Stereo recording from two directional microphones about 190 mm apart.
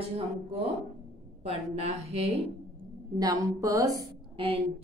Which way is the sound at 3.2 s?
20° right (ahead or behind).